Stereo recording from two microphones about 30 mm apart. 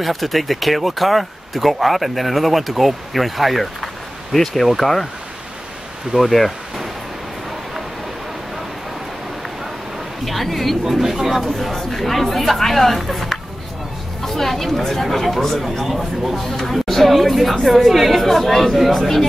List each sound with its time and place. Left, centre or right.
0.0 s speech: centre
6.1 s speech: right
10.2 s speech: centre
10.8 s speech: centre
11.4 s speech: centre
16.4 s speech: centre
16.8 s speech: centre